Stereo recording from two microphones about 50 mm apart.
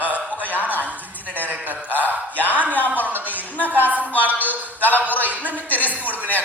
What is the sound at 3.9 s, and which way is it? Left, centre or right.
A man's voice, right.